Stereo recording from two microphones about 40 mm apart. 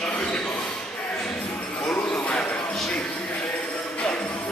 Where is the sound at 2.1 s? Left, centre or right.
Left.